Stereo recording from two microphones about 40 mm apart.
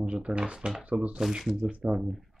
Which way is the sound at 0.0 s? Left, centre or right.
Right.